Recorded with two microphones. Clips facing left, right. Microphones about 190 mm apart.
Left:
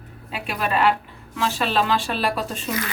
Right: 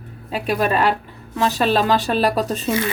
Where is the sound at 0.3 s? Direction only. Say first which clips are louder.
Right 6 dB; 40° right (ahead or behind).